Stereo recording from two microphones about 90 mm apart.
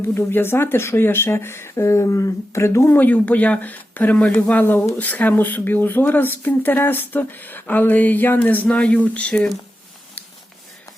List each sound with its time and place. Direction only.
0.1 s speech: 25° left (ahead or behind)
3.0 s speech: 15° left (ahead or behind)